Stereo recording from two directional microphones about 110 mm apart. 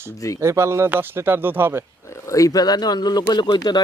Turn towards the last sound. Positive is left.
turn(degrees=40)  # may be behind; listen again after turning